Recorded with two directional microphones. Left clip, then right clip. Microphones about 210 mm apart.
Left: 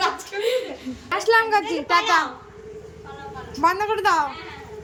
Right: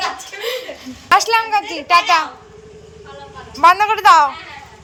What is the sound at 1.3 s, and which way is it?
Speech, 5° left (ahead or behind).